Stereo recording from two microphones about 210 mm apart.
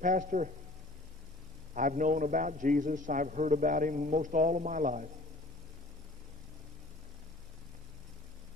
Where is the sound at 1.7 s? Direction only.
40° right (ahead or behind).